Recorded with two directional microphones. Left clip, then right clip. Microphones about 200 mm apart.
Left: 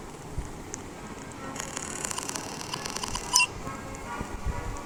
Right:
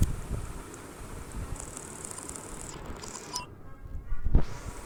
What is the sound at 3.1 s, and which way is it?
Camera, 25° left (ahead or behind).